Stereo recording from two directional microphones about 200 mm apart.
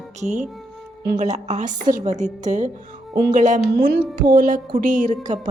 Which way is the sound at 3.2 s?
45° right (ahead or behind).